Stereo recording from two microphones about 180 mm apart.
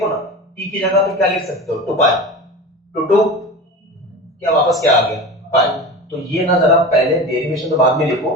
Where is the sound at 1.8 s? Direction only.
Centre (ahead or behind).